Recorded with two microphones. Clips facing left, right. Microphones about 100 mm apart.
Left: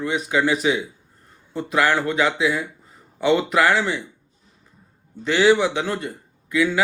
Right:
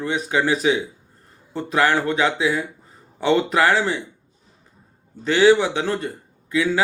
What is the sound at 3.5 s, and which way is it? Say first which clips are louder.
Speech: even; 30° right (ahead or behind).